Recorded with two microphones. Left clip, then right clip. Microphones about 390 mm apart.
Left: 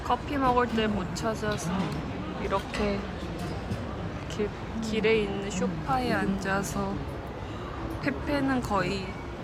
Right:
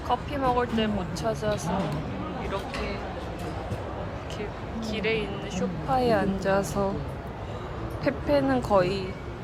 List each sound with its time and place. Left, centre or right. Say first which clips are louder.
0.1 s speech: even; centre
4.4 s speech: left 6 dB; centre
8.0 s speech: right 5 dB; centre